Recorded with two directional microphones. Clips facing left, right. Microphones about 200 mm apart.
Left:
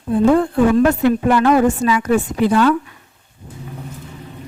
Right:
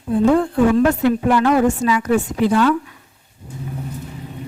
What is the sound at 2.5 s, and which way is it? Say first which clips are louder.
Speech: left 2 dB; 55° left (ahead or behind).